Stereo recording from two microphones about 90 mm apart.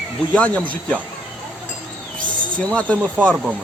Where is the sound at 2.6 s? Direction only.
15° left (ahead or behind).